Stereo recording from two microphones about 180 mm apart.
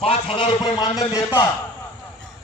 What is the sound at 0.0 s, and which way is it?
A man's voice, 30° left (ahead or behind).